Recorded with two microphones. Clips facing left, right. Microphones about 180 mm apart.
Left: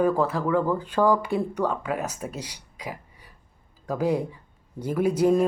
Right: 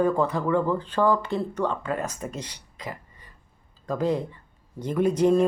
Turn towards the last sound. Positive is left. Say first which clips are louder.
# even
turn(degrees=10)  # may be behind; listen again after turning